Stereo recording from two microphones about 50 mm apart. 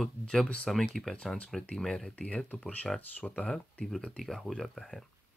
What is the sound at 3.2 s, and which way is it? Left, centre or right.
Speech, centre.